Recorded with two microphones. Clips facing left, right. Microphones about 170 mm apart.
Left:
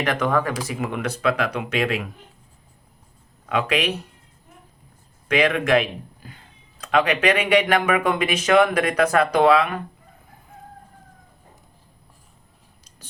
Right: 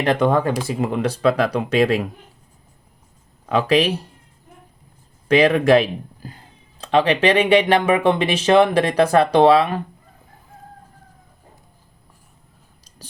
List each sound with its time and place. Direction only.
0.0 s speech: 30° right (ahead or behind)
3.4 s speech: 35° right (ahead or behind)
5.3 s speech: 35° right (ahead or behind)
13.0 s speech: 35° right (ahead or behind)